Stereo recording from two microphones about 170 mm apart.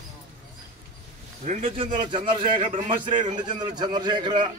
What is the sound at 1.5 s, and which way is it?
A man's voice, 35° right (ahead or behind).